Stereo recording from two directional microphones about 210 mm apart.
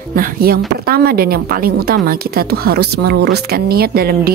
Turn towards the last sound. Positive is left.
turn(degrees=-45)  # may be behind; listen again after turning